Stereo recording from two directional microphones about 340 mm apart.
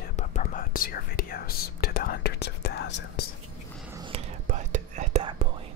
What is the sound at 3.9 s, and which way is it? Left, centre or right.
Whispering, centre.